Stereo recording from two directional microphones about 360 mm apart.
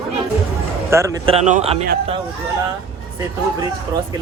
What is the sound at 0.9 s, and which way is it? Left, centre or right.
A man's voice, centre.